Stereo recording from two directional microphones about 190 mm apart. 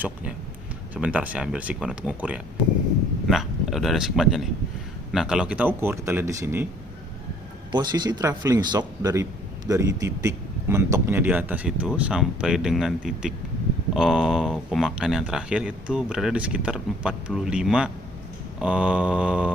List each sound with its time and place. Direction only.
0.9 s a man's voice: 5° right (ahead or behind)
7.7 s a man's voice: 20° right (ahead or behind); by 19.5 s 5° right (ahead or behind)